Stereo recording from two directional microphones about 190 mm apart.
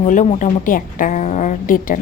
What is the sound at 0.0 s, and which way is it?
A woman's voice, 40° left (ahead or behind).